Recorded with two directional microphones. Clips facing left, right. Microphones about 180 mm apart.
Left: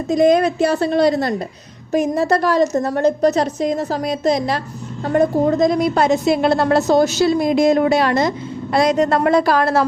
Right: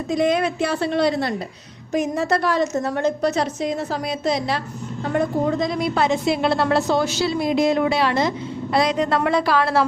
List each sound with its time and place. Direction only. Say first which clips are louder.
0.1 s a woman's voice: left 6 dB; 40° left (ahead or behind)